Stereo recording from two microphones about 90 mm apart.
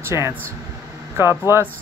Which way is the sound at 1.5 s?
30° right (ahead or behind).